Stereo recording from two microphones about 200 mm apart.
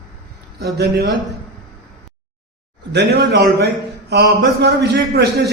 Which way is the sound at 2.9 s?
55° right (ahead or behind).